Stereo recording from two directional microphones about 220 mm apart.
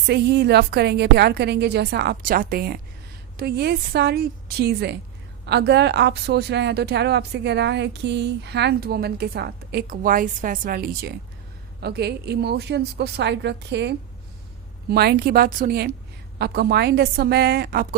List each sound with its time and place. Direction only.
0.1 s speech: 50° right (ahead or behind)